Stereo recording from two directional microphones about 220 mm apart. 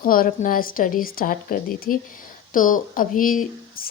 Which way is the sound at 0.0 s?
40° left (ahead or behind).